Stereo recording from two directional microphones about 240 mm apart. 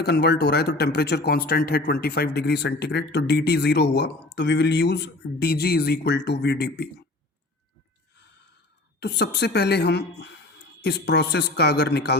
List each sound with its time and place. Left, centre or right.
0.0 s speech: left
9.0 s speech: left